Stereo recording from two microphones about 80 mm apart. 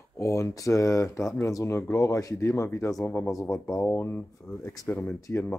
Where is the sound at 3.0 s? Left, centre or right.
Left.